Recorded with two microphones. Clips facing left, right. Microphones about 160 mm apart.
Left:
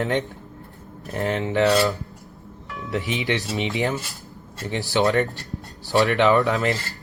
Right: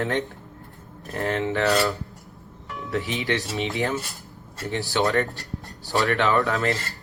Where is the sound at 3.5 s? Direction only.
20° left (ahead or behind).